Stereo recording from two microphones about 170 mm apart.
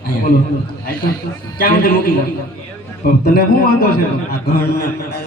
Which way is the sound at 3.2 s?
65° left (ahead or behind).